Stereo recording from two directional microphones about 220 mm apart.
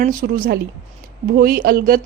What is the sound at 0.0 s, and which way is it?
A woman's voice, 40° right (ahead or behind).